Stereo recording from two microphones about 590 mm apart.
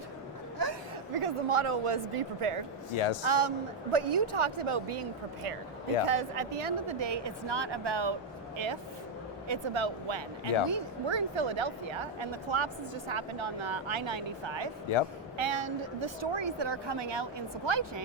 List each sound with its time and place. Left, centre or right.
1.1 s speech: right
2.9 s speech: left
3.2 s speech: right